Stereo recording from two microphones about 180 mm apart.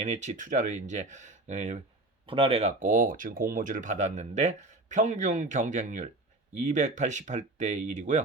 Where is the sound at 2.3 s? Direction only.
30° right (ahead or behind).